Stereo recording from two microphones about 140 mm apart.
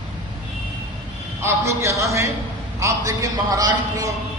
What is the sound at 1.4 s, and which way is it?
A man's voice, 20° right (ahead or behind).